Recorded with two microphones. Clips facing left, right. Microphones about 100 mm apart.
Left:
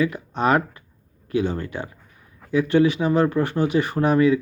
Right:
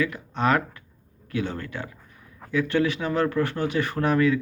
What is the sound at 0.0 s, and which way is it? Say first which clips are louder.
A man's voice: left 3 dB; 20° left (ahead or behind).